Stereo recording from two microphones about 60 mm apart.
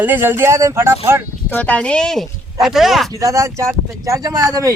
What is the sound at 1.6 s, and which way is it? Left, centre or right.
Speech, left.